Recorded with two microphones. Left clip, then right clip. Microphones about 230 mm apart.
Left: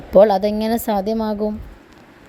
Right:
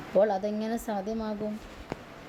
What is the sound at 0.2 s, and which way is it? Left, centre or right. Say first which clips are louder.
Speech: left 12 dB; left.